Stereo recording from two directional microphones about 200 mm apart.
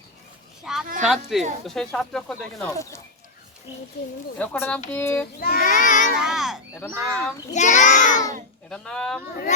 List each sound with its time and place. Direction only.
0.6 s a child's voice: centre (ahead or behind)
4.4 s speech: 10° left (ahead or behind)
5.4 s child singing: 50° left (ahead or behind)
6.1 s a sound: centre (ahead or behind)
7.5 s child singing: 40° left (ahead or behind)
8.7 s speech: 5° left (ahead or behind)